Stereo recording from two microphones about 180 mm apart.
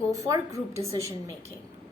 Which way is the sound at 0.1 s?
20° right (ahead or behind).